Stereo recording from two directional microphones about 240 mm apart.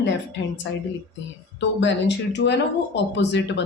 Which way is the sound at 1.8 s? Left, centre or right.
Left.